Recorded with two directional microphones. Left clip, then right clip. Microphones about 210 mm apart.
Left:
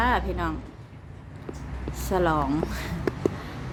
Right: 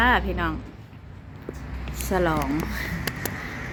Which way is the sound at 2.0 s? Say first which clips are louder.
Even; centre (ahead or behind).